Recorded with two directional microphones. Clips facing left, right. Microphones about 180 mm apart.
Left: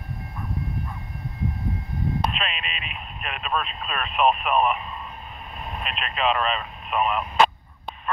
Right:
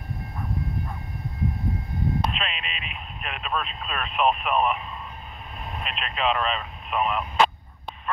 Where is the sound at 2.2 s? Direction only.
55° left (ahead or behind).